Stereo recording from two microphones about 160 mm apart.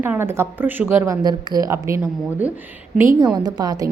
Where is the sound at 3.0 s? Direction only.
15° right (ahead or behind).